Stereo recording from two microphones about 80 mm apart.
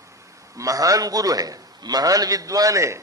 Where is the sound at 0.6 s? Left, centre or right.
Right.